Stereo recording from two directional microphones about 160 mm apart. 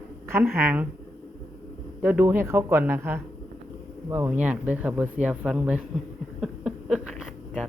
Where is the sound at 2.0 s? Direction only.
10° right (ahead or behind).